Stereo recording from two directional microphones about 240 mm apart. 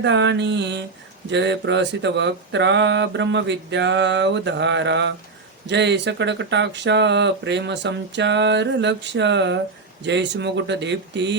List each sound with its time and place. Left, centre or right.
0.0 s speech: right